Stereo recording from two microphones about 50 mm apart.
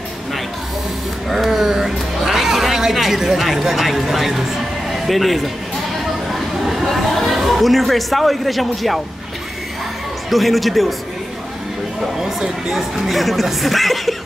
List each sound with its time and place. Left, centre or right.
1.3 s speech: centre
10.3 s speech: centre
12.0 s speech: centre